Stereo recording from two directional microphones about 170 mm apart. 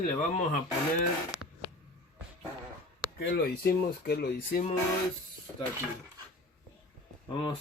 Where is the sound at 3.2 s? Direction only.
70° left (ahead or behind).